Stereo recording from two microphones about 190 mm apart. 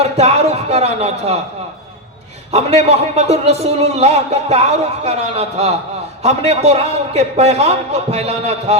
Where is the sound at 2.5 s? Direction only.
35° right (ahead or behind).